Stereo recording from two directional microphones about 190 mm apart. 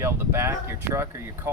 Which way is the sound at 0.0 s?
15° right (ahead or behind).